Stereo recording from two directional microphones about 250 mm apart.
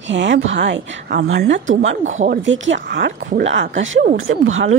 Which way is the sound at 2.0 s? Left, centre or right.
Right.